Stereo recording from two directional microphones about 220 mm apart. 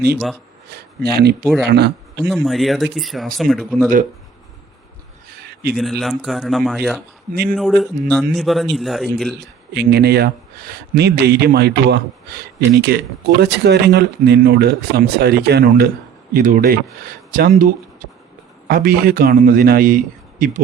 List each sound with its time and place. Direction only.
0.7 s speech: 45° right (ahead or behind)
2.2 s speech: centre (ahead or behind)
5.7 s speech: centre (ahead or behind)
9.7 s a man's voice: 45° right (ahead or behind)